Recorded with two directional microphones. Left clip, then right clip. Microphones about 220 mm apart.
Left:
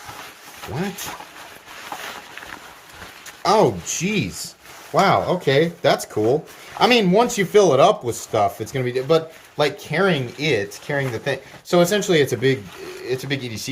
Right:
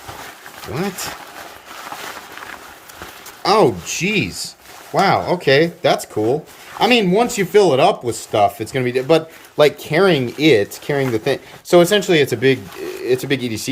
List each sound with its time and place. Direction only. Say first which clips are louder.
3.4 s speech: right 3 dB; centre (ahead or behind)
13.1 s speech: right 7 dB; 20° right (ahead or behind)